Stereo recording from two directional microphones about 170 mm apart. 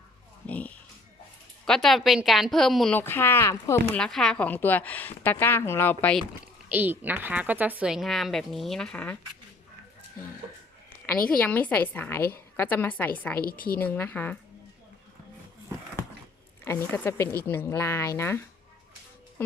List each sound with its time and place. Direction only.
0.4 s speech: 10° left (ahead or behind)
3.9 s a woman's voice: 5° left (ahead or behind)
6.4 s speech: 10° right (ahead or behind); by 9.1 s 5° left (ahead or behind)
11.0 s a woman's voice: 10° left (ahead or behind)
13.4 s a woman's voice: 60° left (ahead or behind)
13.7 s a woman's voice: 10° left (ahead or behind)
16.6 s a woman's voice: 10° left (ahead or behind)